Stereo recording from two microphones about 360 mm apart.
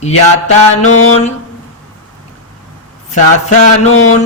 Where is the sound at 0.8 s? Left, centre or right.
Left.